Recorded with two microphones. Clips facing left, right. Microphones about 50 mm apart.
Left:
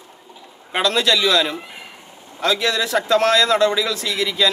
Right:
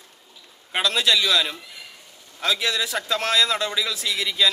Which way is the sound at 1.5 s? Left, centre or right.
Left.